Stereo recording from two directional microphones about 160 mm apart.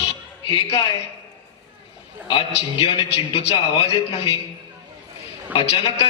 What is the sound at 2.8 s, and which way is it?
A man's voice, 35° left (ahead or behind).